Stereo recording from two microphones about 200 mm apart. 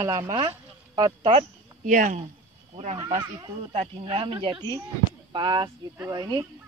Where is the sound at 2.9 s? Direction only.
25° right (ahead or behind).